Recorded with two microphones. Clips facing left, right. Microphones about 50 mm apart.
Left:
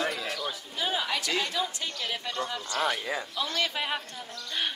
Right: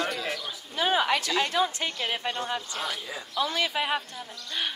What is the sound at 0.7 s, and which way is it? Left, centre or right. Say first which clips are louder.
A woman's voice: right 7 dB; right.